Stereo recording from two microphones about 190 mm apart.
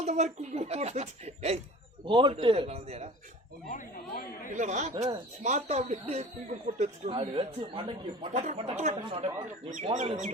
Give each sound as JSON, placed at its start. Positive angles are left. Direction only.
{"t": 0.0, "sound": "a man's voice", "side_deg": -35}
{"t": 3.7, "sound": "speech", "side_deg": 45}
{"t": 4.5, "sound": "speech", "side_deg": -40}